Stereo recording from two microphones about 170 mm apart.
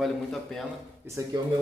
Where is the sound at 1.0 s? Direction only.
15° right (ahead or behind).